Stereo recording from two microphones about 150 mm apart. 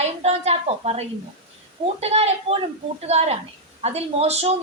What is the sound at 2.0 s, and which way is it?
A woman's voice, 45° right (ahead or behind).